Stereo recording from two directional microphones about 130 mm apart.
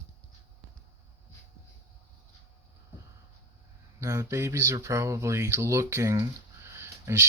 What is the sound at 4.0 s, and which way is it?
Speech, 20° right (ahead or behind).